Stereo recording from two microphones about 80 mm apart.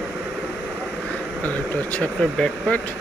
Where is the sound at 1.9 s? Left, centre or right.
Centre.